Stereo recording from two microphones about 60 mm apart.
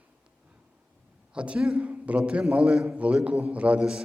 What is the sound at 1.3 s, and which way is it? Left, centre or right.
Speech, centre.